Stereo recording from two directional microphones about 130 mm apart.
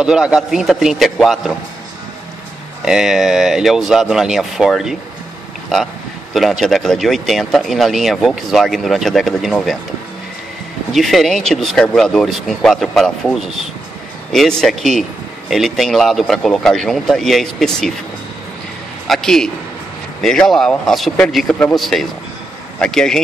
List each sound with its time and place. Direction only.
0.0 s a man's voice: 5° right (ahead or behind)
2.8 s a man's voice: 5° right (ahead or behind)
6.3 s a man's voice: centre (ahead or behind)
10.9 s a man's voice: centre (ahead or behind)
19.0 s a man's voice: centre (ahead or behind)